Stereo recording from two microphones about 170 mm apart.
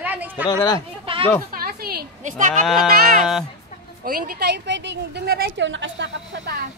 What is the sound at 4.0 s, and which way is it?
A woman's voice, 60° right (ahead or behind).